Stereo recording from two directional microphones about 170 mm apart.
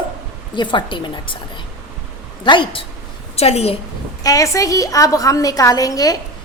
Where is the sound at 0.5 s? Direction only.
25° left (ahead or behind).